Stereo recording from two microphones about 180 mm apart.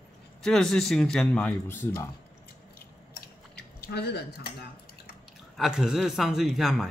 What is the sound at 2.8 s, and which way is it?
Chewing, 60° left (ahead or behind).